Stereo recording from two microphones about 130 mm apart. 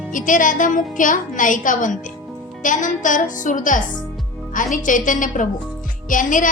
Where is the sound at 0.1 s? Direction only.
90° left.